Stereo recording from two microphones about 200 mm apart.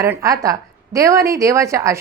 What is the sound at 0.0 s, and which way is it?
Speech, 15° right (ahead or behind).